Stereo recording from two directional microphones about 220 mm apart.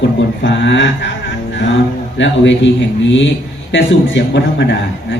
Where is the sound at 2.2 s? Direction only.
55° left (ahead or behind).